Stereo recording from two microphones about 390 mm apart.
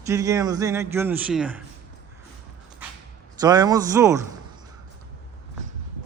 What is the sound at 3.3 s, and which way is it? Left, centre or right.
Speech, centre.